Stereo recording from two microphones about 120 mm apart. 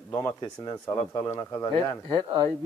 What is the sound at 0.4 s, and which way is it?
Speech, 30° left (ahead or behind).